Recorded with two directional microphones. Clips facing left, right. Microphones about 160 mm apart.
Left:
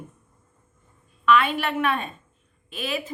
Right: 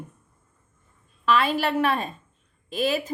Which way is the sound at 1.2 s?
35° right (ahead or behind).